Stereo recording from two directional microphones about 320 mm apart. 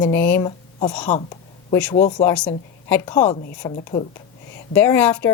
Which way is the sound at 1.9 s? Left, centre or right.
Centre.